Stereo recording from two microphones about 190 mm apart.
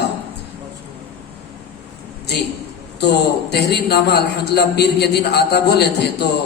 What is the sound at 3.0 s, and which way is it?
A man's voice, 60° left (ahead or behind).